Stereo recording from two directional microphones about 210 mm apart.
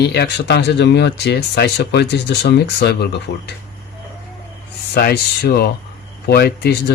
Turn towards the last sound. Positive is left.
turn(degrees=50)  # may be behind; listen again after turning